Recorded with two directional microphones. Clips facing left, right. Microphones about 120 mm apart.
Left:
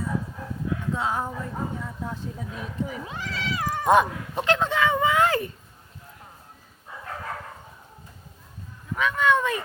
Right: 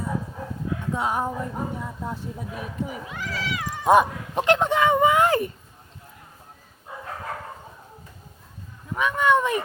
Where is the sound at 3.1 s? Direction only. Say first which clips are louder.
Right 1 dB; 30° left (ahead or behind).